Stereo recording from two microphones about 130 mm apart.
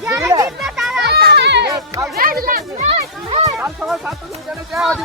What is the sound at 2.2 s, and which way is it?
Speech, 90° right.